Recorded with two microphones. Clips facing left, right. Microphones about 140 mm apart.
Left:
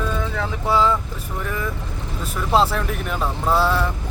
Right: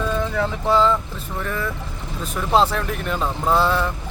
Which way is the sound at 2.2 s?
5° left (ahead or behind).